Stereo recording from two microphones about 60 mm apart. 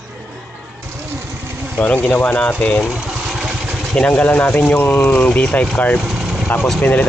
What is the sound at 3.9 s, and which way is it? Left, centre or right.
Speech, left.